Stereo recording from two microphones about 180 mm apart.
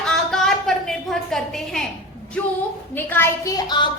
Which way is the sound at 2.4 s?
10° left (ahead or behind).